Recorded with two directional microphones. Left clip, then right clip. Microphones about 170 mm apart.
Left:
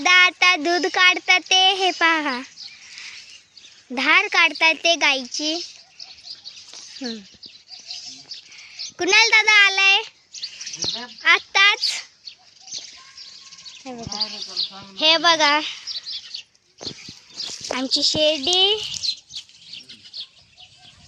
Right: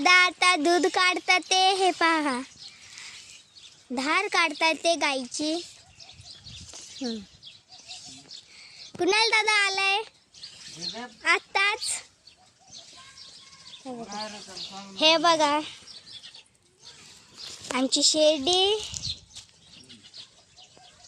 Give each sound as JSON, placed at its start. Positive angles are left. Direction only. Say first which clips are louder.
{"t": 0.0, "sound": "speech", "louder": "left 5 dB", "side_deg": -15}
{"t": 2.9, "sound": "a sound", "louder": "left 5 dB", "side_deg": 0}
{"t": 3.9, "sound": "speech", "louder": "left 8 dB", "side_deg": -5}
{"t": 8.5, "sound": "a sound", "louder": "left 6 dB", "side_deg": -5}
{"t": 9.0, "sound": "speech", "louder": "left 7 dB", "side_deg": -10}
{"t": 11.2, "sound": "speech", "louder": "left 8 dB", "side_deg": -15}
{"t": 13.8, "sound": "speech", "louder": "left 8 dB", "side_deg": 5}
{"t": 14.7, "sound": "speech", "louder": "left 3 dB", "side_deg": -10}
{"t": 17.7, "sound": "speech", "louder": "left 2 dB", "side_deg": -20}